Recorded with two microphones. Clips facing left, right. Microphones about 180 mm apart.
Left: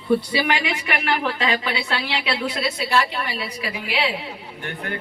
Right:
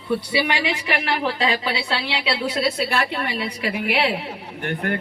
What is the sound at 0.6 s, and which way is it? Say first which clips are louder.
A woman's voice: right 1 dB; 30° right (ahead or behind).